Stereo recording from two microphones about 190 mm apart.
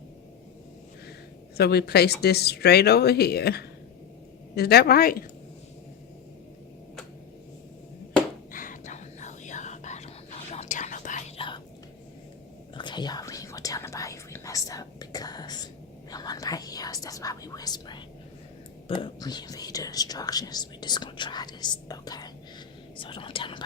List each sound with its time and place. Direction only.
1.5 s a woman's voice: 60° left (ahead or behind)
8.5 s whispering: 45° left (ahead or behind)
11.3 s whispering: 25° left (ahead or behind)
12.7 s whispering: 25° left (ahead or behind)